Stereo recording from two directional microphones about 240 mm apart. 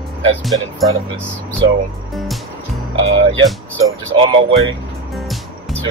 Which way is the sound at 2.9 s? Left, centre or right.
Right.